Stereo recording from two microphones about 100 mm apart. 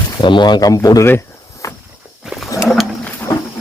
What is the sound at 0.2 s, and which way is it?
Speech, 50° left (ahead or behind).